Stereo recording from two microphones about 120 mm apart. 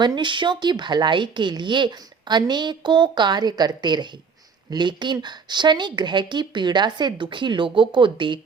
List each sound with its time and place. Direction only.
0.0 s a woman's voice: 40° right (ahead or behind)